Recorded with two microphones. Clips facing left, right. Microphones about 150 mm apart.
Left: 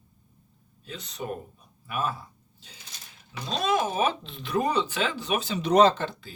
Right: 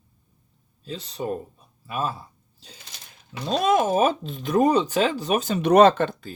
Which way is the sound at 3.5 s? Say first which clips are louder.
Right 6 dB; 55° right (ahead or behind).